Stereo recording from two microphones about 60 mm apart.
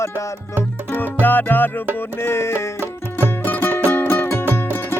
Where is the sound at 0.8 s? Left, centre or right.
Left.